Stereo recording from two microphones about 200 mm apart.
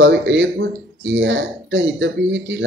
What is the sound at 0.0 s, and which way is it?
Speech, 65° right (ahead or behind).